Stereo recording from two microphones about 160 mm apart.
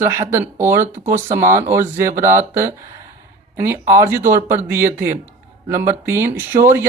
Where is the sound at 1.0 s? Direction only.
50° right (ahead or behind).